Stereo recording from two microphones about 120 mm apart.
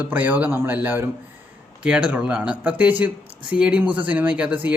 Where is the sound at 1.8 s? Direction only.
10° right (ahead or behind).